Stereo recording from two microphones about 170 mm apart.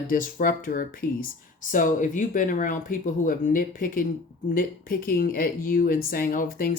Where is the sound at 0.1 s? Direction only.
55° left (ahead or behind).